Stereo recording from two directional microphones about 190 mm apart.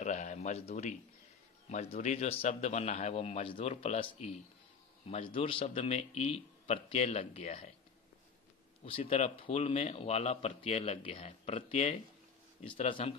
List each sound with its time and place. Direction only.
0.0 s a sound: 40° left (ahead or behind)
1.7 s a man's voice: 35° left (ahead or behind)
8.8 s a man's voice: 30° left (ahead or behind)